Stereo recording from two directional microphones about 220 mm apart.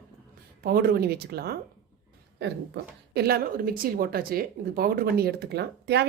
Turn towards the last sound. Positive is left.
turn(degrees=-50)  # may be behind; listen again after turning